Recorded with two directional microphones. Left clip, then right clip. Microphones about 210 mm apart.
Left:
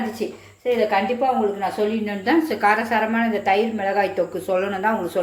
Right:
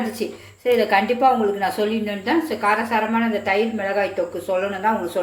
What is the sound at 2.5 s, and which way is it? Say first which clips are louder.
A woman's voice: left 1 dB; 25° left (ahead or behind).